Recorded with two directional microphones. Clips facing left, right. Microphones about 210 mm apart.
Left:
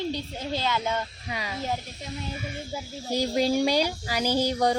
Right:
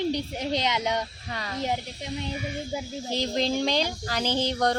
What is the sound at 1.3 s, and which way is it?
Speech, 10° left (ahead or behind).